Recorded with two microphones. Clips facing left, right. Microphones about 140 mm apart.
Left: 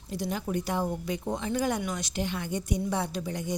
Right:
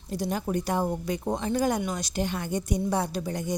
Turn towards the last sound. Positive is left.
turn(degrees=-45)  # may be behind; listen again after turning